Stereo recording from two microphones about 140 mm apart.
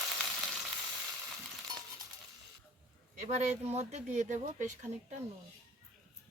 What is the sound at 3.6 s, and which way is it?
Speech, 50° right (ahead or behind).